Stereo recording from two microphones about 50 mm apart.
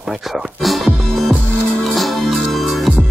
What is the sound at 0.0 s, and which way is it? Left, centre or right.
Music, centre.